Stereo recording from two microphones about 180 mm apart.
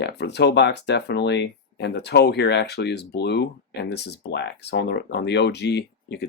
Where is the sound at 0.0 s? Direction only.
70° left (ahead or behind).